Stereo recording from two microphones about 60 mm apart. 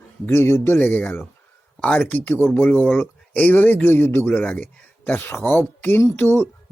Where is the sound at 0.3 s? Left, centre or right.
Left.